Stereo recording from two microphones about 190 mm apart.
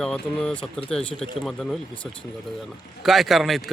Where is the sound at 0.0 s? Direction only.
5° left (ahead or behind).